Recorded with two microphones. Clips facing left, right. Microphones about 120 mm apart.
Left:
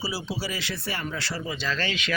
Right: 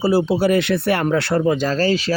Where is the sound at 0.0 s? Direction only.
55° right (ahead or behind).